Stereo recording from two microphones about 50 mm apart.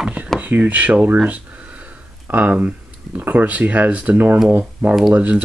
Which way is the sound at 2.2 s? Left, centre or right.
Right.